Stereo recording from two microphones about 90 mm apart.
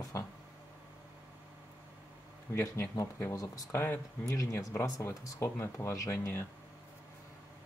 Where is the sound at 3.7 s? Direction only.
25° left (ahead or behind).